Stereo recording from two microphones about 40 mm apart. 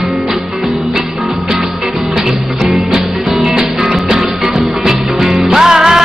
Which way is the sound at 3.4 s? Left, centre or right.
Centre.